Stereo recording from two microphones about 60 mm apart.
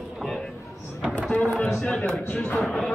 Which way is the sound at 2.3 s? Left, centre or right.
Left.